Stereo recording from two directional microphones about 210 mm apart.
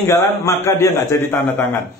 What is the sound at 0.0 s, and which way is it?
A man's voice, 15° left (ahead or behind).